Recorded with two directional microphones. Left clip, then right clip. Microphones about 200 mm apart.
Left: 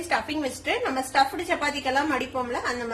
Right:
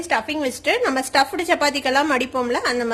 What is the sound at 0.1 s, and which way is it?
A woman's voice, 35° right (ahead or behind).